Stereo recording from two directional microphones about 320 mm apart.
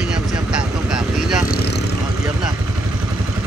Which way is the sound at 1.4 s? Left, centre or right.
Left.